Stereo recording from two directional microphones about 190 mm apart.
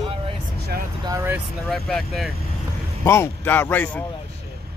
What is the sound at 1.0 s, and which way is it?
Vehicle, 15° right (ahead or behind).